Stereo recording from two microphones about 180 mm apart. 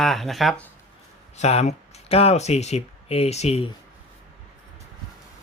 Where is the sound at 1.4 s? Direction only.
40° left (ahead or behind).